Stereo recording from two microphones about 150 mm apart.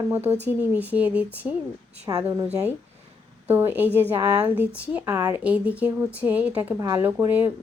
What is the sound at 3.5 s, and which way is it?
A woman's voice, 15° right (ahead or behind).